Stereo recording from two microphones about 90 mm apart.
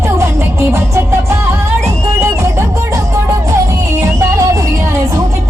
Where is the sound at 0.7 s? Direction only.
30° right (ahead or behind).